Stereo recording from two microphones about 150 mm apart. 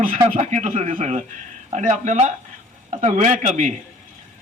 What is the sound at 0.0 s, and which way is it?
A man's voice, 55° right (ahead or behind).